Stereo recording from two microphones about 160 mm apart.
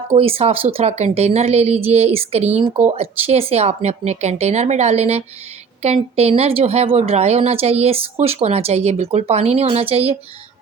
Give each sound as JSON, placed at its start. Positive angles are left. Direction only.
{"t": 0.1, "sound": "a woman's voice", "side_deg": -40}